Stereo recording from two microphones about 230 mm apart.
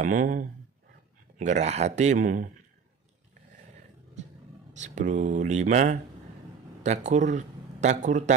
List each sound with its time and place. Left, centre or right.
0.0 s speech: right
4.7 s speech: right